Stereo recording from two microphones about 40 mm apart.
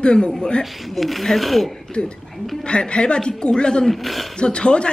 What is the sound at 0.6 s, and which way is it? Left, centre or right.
Speech, centre.